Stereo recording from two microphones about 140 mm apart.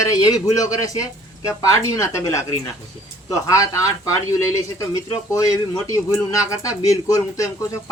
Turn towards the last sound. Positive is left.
turn(degrees=25)  # may be behind; listen again after turning